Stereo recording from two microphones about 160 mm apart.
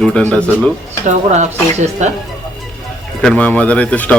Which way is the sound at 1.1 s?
45° right (ahead or behind).